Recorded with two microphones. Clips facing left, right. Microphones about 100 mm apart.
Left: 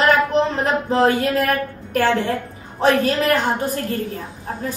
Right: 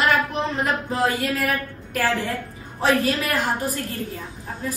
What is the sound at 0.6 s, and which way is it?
Speech, 30° left (ahead or behind).